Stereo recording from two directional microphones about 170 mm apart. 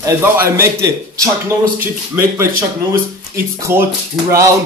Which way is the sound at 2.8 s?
20° right (ahead or behind).